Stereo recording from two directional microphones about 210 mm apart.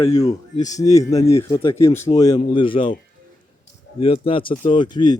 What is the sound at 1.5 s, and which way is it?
Speech, 10° left (ahead or behind).